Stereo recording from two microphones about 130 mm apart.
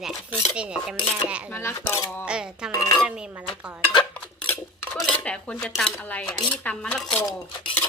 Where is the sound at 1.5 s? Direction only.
20° left (ahead or behind).